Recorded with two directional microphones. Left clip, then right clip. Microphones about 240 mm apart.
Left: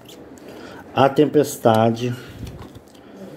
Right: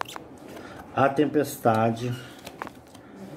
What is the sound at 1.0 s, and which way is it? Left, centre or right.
Speech, left.